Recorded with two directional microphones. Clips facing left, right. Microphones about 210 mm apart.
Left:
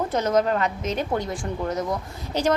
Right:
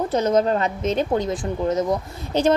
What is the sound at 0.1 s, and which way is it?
A woman's voice, 20° right (ahead or behind).